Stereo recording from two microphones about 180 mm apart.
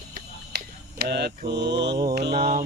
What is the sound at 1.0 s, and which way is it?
Mantra, 65° right (ahead or behind).